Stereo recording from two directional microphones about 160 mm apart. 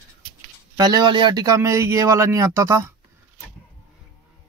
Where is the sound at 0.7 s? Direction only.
25° right (ahead or behind).